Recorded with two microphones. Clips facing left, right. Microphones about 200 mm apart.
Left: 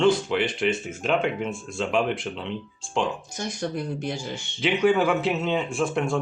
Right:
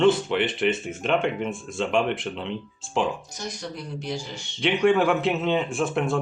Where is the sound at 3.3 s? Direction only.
50° left (ahead or behind).